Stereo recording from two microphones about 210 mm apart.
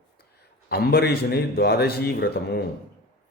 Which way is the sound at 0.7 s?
50° left (ahead or behind).